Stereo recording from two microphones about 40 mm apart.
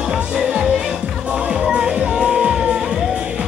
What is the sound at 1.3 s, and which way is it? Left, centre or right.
Music, right.